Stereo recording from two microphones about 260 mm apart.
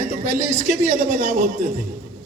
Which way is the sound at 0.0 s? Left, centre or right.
Right.